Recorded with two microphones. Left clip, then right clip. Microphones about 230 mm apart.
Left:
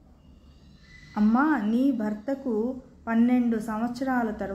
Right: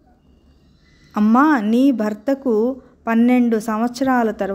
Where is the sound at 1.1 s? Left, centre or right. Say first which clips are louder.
Right 9 dB; right.